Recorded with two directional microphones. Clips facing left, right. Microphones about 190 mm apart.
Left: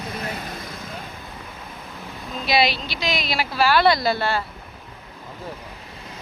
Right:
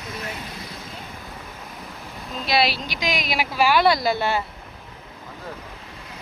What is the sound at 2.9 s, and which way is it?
Speech, 15° right (ahead or behind).